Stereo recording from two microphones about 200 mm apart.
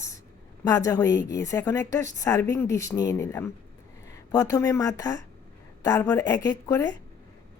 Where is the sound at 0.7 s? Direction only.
15° left (ahead or behind).